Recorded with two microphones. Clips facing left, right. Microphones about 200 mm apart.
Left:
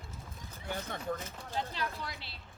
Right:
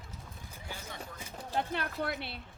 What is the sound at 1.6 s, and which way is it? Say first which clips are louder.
Speech: right 4 dB; 60° right (ahead or behind).